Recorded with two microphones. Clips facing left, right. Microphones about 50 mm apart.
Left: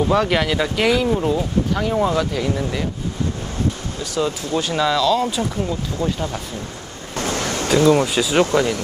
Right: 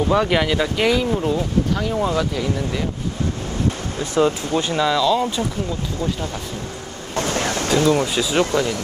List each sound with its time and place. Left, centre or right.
0.1 s speech: centre
4.0 s speech: right
4.7 s speech: centre
7.7 s speech: centre